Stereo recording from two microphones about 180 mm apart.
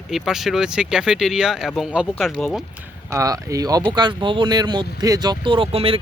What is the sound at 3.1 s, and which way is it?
Speech, 15° right (ahead or behind).